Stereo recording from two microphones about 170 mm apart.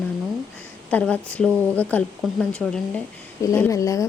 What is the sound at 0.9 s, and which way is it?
A woman's voice, 10° left (ahead or behind).